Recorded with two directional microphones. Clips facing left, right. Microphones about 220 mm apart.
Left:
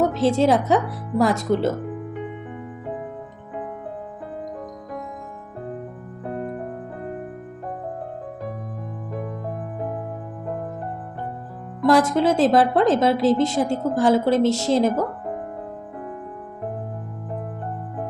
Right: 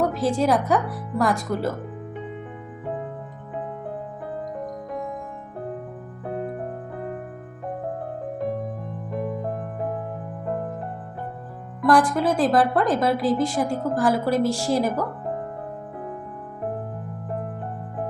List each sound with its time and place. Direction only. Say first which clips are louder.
0.0 s a woman's voice: left 3 dB; 25° left (ahead or behind)
6.2 s music: even; 5° right (ahead or behind)
11.8 s a woman's voice: left 2 dB; 25° left (ahead or behind)